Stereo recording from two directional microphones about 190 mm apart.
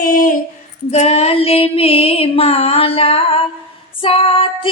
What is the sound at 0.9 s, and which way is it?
Female singing, 35° left (ahead or behind).